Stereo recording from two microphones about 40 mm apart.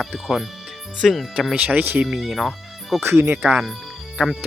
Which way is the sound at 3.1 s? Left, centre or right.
Right.